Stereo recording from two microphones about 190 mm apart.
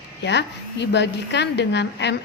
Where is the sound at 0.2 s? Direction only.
65° left (ahead or behind).